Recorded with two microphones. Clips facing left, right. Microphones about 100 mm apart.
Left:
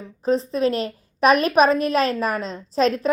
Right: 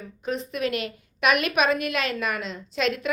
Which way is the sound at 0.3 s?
30° left (ahead or behind).